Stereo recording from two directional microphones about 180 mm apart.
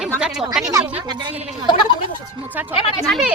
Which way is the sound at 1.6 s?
25° left (ahead or behind).